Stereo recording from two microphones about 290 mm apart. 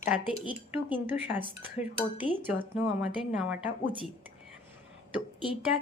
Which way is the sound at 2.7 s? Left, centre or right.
Centre.